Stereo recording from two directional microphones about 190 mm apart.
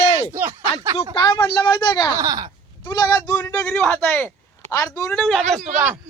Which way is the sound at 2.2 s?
20° right (ahead or behind).